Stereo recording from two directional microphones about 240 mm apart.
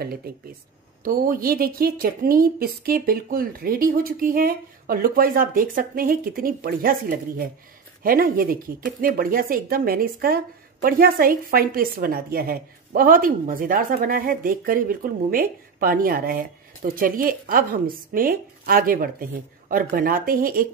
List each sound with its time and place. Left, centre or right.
0.0 s speech: right